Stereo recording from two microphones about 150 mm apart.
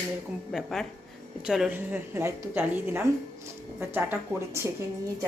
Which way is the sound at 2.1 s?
15° right (ahead or behind).